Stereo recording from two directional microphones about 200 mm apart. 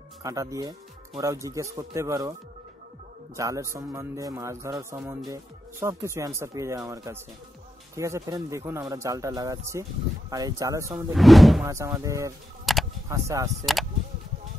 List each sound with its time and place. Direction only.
0.2 s speech: 15° right (ahead or behind)
3.3 s speech: 15° right (ahead or behind)
11.1 s speech: centre (ahead or behind)
11.6 s speech: 15° right (ahead or behind)
12.7 s a sound: centre (ahead or behind)
13.1 s speech: 15° right (ahead or behind)